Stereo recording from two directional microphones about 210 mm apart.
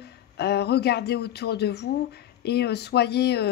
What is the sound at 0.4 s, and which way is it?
Speech, 50° left (ahead or behind).